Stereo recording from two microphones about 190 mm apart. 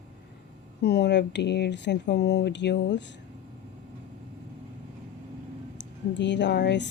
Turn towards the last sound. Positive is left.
turn(degrees=65)  # may be behind; listen again after turning